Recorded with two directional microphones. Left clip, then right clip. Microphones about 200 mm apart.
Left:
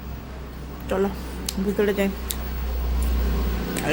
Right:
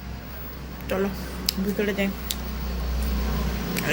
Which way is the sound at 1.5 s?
30° left (ahead or behind).